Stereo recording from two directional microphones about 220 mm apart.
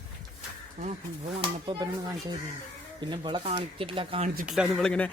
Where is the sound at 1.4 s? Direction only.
20° right (ahead or behind).